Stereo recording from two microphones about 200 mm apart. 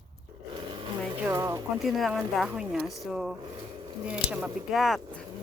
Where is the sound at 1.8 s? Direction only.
Centre (ahead or behind).